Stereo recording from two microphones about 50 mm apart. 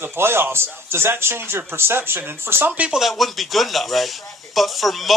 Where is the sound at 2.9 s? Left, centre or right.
Centre.